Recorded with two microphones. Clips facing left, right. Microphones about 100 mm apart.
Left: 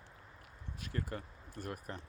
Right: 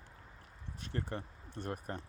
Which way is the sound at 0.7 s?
30° right (ahead or behind).